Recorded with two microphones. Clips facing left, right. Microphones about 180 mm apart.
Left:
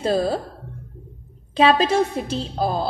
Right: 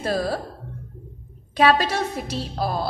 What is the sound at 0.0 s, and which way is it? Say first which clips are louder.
Speech: left 4 dB; 25° left (ahead or behind).